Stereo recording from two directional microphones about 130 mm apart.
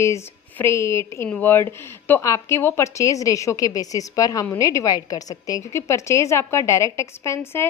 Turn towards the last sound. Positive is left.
turn(degrees=20)  # may be behind; listen again after turning